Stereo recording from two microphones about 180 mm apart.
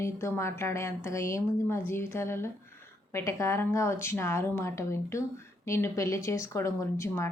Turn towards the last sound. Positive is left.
turn(degrees=15)  # may be behind; listen again after turning